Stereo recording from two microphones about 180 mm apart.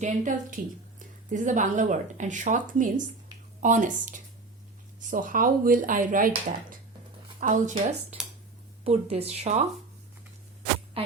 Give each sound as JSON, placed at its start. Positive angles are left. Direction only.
{"t": 0.0, "sound": "a woman's voice", "side_deg": -45}
{"t": 11.0, "sound": "music", "side_deg": -30}